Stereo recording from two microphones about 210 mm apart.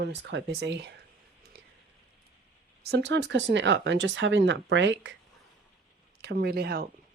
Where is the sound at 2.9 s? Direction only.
55° right (ahead or behind).